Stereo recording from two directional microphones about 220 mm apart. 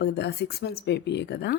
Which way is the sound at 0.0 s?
50° left (ahead or behind).